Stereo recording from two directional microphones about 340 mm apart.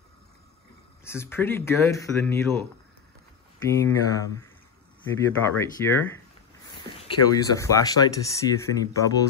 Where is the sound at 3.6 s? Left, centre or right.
Centre.